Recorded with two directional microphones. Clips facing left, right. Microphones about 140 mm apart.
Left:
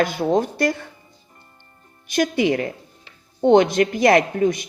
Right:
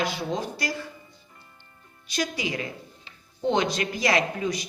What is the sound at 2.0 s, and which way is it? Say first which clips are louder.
Speech: left 10 dB; 50° left (ahead or behind).